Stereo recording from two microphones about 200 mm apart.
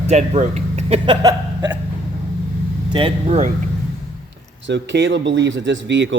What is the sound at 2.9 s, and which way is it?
Speech, 30° right (ahead or behind).